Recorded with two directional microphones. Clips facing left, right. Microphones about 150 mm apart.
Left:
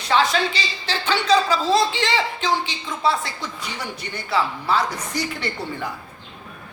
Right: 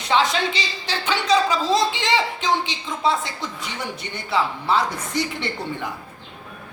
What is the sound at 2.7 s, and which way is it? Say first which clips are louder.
A woman's voice: even; 20° right (ahead or behind).